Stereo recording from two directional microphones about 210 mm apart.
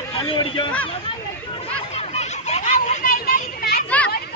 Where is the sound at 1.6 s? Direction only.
30° left (ahead or behind).